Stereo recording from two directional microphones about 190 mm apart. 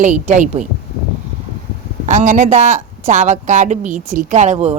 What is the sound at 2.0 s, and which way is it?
Speech, 40° right (ahead or behind).